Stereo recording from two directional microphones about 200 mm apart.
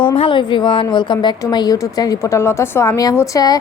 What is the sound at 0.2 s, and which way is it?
A woman's voice, 25° left (ahead or behind).